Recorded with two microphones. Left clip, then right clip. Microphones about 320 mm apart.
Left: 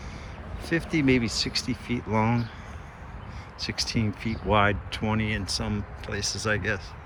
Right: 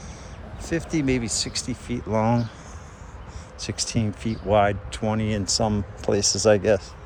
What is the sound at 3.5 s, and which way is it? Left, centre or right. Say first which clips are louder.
Speech: right 1 dB; centre.